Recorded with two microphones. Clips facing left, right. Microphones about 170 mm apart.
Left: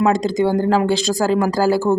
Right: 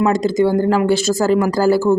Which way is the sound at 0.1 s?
15° left (ahead or behind).